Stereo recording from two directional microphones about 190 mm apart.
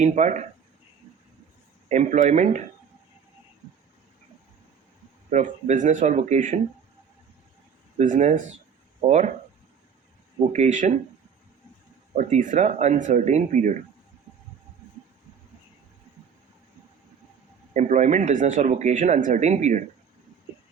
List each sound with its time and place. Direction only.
0.0 s speech: 40° right (ahead or behind)
1.9 s speech: 40° right (ahead or behind)
5.3 s speech: 40° right (ahead or behind)
7.9 s speech: 40° right (ahead or behind)
10.5 s speech: 40° right (ahead or behind)
12.1 s speech: 40° right (ahead or behind)
17.7 s speech: 40° right (ahead or behind)